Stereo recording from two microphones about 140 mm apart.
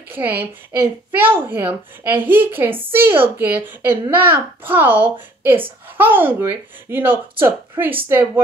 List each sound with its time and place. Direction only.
0.1 s a woman's voice: 15° right (ahead or behind)